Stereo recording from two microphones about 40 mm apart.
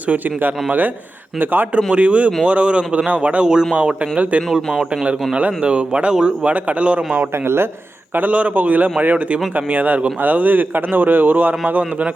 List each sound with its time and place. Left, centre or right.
0.4 s speech: right
1.7 s a man's voice: right
3.4 s a man's voice: centre
4.2 s a man's voice: right
4.5 s a man's voice: centre
5.4 s speech: right
6.5 s a man's voice: right
7.4 s speech: right
8.3 s a man's voice: right